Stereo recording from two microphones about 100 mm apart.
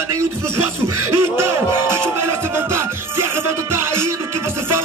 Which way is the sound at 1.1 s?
25° right (ahead or behind).